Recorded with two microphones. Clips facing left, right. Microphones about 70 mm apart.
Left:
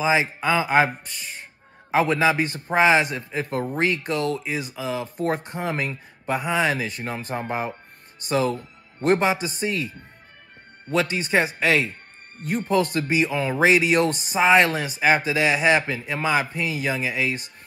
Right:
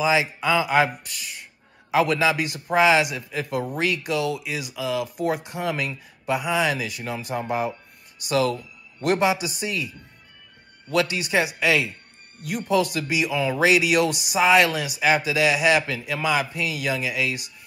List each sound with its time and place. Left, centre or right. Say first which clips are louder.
0.0 s speech: even; left
1.9 s speech: left 1 dB; left
11.0 s speech: left 1 dB; left